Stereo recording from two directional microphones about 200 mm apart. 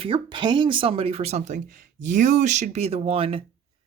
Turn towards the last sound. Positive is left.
turn(degrees=-30)  # may be behind; listen again after turning